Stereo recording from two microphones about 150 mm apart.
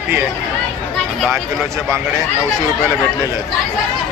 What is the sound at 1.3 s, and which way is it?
Speech, 20° right (ahead or behind).